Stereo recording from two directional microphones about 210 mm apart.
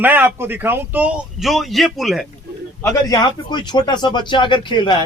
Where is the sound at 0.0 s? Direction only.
10° right (ahead or behind).